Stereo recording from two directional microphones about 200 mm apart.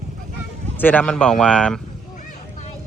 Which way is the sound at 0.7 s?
10° left (ahead or behind).